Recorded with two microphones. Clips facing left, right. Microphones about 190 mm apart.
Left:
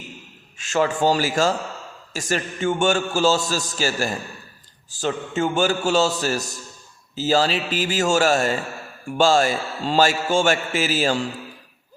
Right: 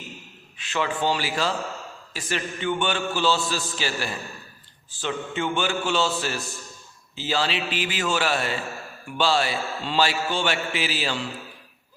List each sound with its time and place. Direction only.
0.6 s a man's voice: 45° left (ahead or behind)